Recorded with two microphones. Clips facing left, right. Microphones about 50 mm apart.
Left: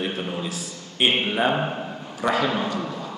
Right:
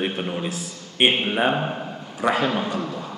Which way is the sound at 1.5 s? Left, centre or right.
Centre.